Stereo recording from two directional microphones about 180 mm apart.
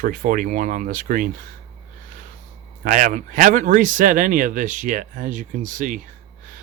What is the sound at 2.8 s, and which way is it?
Speech, 45° right (ahead or behind).